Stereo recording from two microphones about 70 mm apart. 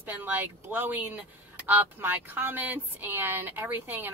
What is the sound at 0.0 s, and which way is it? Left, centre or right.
A woman's voice, right.